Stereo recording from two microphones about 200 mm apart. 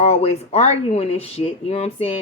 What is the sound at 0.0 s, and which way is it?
A woman's voice, 30° left (ahead or behind).